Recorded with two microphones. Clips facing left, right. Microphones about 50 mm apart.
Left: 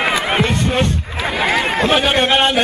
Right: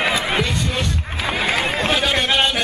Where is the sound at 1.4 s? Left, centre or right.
Left.